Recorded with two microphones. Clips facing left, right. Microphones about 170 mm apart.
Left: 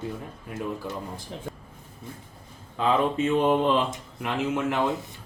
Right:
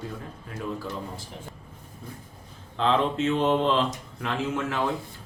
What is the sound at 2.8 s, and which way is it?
Speech, 10° left (ahead or behind).